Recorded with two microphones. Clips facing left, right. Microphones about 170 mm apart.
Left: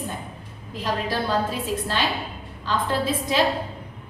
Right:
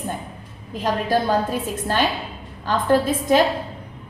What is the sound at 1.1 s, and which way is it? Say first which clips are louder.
A woman's voice: right 6 dB; 50° right (ahead or behind).